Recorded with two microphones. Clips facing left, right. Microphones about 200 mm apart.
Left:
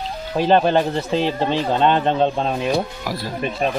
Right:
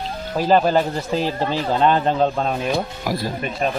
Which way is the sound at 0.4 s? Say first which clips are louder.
Left 1 dB; 5° right (ahead or behind).